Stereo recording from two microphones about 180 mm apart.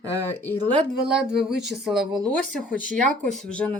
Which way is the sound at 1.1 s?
5° right (ahead or behind).